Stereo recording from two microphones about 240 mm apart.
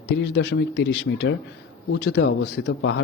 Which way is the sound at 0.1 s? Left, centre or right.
Left.